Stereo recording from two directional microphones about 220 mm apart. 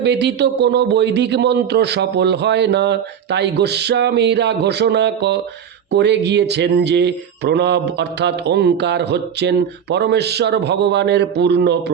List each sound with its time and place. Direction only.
0.0 s speech: 50° right (ahead or behind)